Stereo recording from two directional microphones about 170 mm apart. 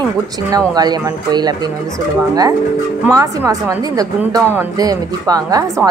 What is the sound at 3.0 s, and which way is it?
A woman's voice, 20° right (ahead or behind).